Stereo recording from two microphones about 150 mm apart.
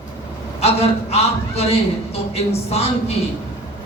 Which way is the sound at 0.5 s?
45° left (ahead or behind).